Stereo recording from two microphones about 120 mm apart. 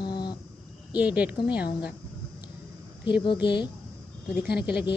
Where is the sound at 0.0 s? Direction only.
35° left (ahead or behind).